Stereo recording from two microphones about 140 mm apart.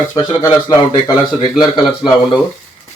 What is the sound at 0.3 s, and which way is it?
A man's voice, 25° left (ahead or behind).